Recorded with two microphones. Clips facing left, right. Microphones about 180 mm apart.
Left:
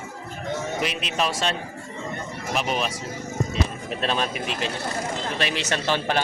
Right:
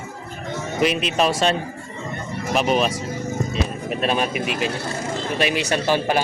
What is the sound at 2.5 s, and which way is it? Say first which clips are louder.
Speech: right 6 dB; 50° right (ahead or behind).